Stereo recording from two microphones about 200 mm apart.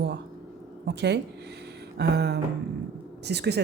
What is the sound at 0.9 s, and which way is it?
A woman's voice, 60° right (ahead or behind).